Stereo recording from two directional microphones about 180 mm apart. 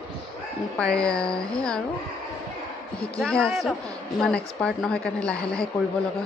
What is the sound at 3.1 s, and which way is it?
A woman's voice, 5° left (ahead or behind).